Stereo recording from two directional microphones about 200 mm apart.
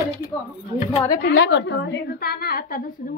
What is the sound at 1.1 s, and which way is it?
A woman's voice, 55° left (ahead or behind).